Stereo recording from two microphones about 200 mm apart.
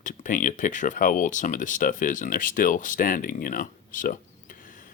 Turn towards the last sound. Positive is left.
turn(degrees=40)  # may be behind; listen again after turning